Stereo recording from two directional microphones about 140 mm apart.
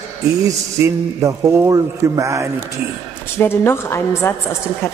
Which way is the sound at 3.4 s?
15° left (ahead or behind).